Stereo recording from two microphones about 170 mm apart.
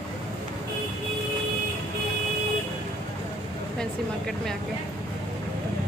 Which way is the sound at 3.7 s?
5° left (ahead or behind).